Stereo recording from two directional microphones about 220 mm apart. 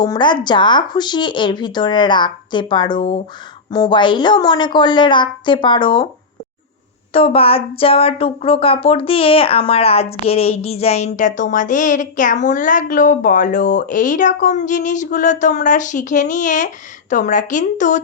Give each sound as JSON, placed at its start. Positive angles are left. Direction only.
{"t": 0.0, "sound": "speech", "side_deg": 20}
{"t": 7.1, "sound": "speech", "side_deg": 25}